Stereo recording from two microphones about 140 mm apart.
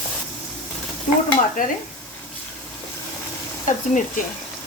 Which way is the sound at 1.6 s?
70° left (ahead or behind).